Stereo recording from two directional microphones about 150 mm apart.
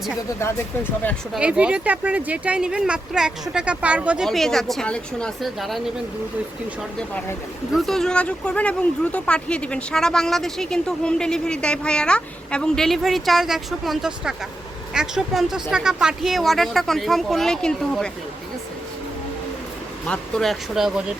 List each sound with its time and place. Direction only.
0.3 s speech: 15° left (ahead or behind)
1.3 s speech: 5° right (ahead or behind)
4.3 s a woman's voice: centre (ahead or behind)
7.7 s a woman's voice: centre (ahead or behind)
20.1 s a woman's voice: 5° left (ahead or behind)